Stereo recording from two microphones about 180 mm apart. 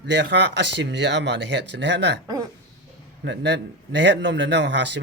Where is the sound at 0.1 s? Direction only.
75° right (ahead or behind).